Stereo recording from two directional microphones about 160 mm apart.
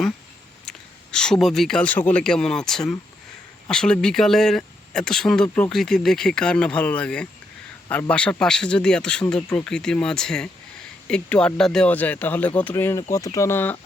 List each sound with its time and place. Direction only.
0.6 s speech: 5° left (ahead or behind)